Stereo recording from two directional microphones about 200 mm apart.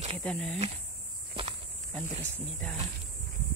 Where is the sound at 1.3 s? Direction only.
25° right (ahead or behind).